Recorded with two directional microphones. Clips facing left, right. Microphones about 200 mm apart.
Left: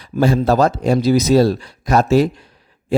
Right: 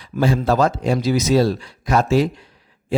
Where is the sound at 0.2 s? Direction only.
40° left (ahead or behind).